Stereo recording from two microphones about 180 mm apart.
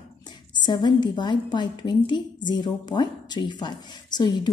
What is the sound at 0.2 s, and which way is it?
A woman's voice, 25° left (ahead or behind).